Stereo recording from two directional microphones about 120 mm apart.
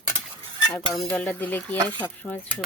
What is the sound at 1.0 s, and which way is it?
Speech, 15° left (ahead or behind).